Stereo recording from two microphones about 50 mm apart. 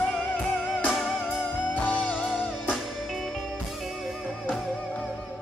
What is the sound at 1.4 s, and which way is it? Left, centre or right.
Music, left.